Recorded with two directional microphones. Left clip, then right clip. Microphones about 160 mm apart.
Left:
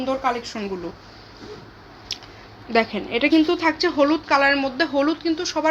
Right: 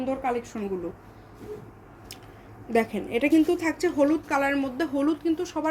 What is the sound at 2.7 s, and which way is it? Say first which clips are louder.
Speech: left 4 dB; centre (ahead or behind).